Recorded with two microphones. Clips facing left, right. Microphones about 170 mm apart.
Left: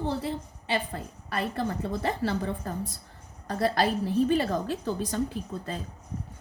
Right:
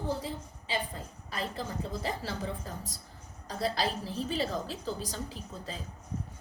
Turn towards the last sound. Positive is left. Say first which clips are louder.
# left 7 dB
turn(degrees=60)  # may be behind; listen again after turning